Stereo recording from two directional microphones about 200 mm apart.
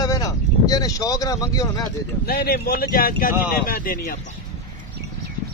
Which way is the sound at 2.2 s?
50° left (ahead or behind).